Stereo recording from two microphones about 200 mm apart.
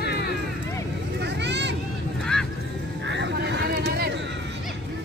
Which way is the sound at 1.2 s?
60° right (ahead or behind).